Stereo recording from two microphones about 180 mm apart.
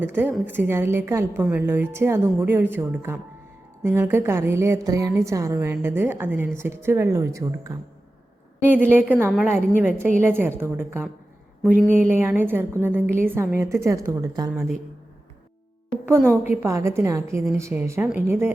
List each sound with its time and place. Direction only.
0.0 s a woman's voice: 10° right (ahead or behind)
11.6 s speech: centre (ahead or behind)
11.9 s a woman's voice: 10° right (ahead or behind)
14.5 s speech: 5° right (ahead or behind)
16.5 s a woman's voice: 15° right (ahead or behind)